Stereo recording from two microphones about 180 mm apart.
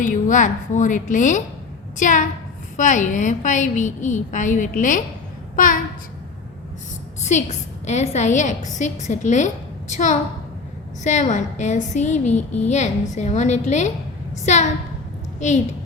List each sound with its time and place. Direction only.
0.0 s a woman's voice: 45° left (ahead or behind)
7.9 s a woman's voice: 40° left (ahead or behind)